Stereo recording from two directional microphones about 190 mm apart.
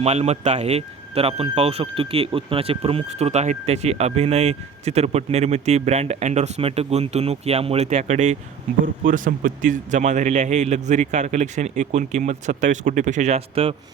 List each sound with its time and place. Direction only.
0.0 s speech: 35° right (ahead or behind)